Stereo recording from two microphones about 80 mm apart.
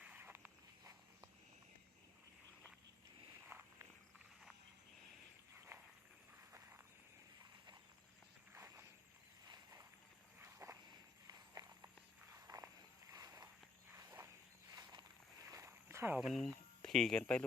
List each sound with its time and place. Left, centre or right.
0.2 s walk: right
3.5 s walk: right
5.7 s a sound: right
8.5 s walk: right
10.4 s walk: right
11.3 s walk: right
12.3 s a sound: right
14.7 s walk: right
15.4 s a sound: right
16.2 s speech: centre